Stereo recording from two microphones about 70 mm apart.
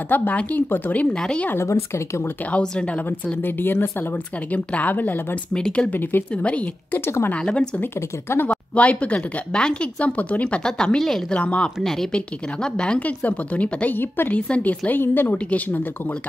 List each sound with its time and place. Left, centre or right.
0.1 s a woman's voice: left
1.1 s speech: centre
1.5 s speech: left
2.5 s speech: centre
3.4 s a woman's voice: left
5.5 s a woman's voice: centre
7.8 s a woman's voice: left
8.7 s speech: centre
11.3 s a woman's voice: centre
11.8 s a woman's voice: centre; by 15.8 s left